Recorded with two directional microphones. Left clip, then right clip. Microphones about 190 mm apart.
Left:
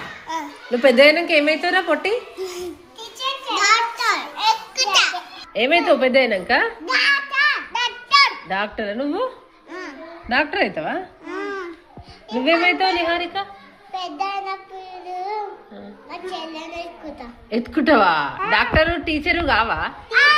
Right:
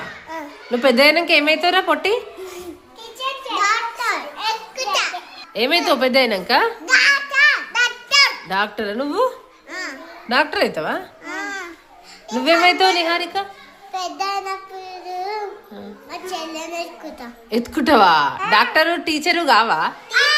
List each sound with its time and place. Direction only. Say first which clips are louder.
0.3 s a child's voice: left 1 dB; 5° right (ahead or behind)
3.5 s a sound: left 2 dB; 5° left (ahead or behind)
4.4 s children playing: left 4 dB; 10° right (ahead or behind)
5.5 s a woman's voice: left 1 dB; 20° right (ahead or behind)
6.8 s a sound: right 3 dB; centre (ahead or behind)
7.7 s a sound: right 1 dB; 15° right (ahead or behind)
10.2 s a woman's voice: right 2 dB; 15° right (ahead or behind)
13.9 s child singing: right 2 dB; 20° right (ahead or behind)
16.1 s a child's voice: right 2 dB; 15° right (ahead or behind)